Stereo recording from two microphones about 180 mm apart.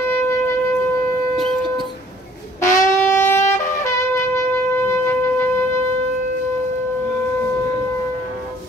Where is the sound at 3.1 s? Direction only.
15° left (ahead or behind).